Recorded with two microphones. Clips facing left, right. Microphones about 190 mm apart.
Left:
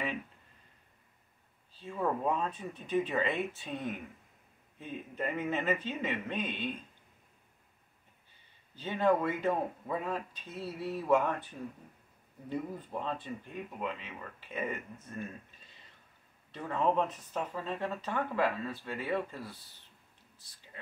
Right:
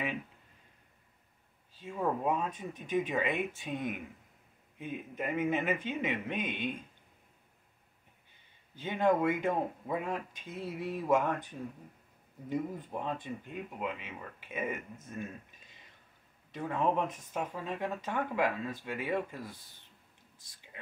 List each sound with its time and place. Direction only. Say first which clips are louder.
1.8 s speech: even; 10° right (ahead or behind)
8.8 s speech: right 1 dB; 15° right (ahead or behind)
12.4 s speech: right 2 dB; 15° right (ahead or behind)
15.0 s a sound: even; 15° right (ahead or behind)
16.5 s speech: left 1 dB; 15° right (ahead or behind)